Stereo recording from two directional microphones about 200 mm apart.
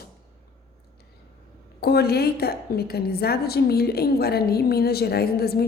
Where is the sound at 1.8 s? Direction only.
50° left (ahead or behind).